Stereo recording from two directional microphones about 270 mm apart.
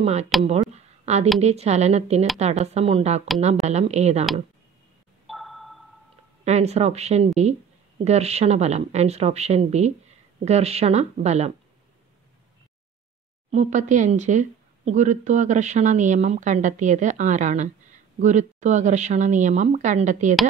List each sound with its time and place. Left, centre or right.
0.0 s speech: right
0.7 s a sound: right
1.4 s speech: right
5.2 s a sound: centre
6.4 s speech: right
13.5 s speech: right